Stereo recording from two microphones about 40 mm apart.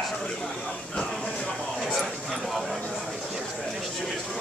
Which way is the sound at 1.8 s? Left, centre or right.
Centre.